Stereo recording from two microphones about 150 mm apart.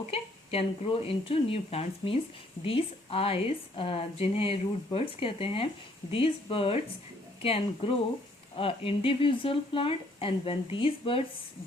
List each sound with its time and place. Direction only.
0.1 s speech: 40° left (ahead or behind)